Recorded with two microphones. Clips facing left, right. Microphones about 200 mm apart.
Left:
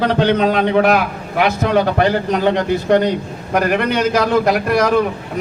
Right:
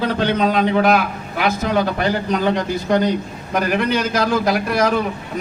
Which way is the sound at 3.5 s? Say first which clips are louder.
Left 2 dB; 60° left (ahead or behind).